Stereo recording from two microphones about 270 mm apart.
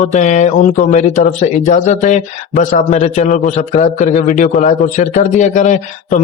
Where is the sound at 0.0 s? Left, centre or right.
Left.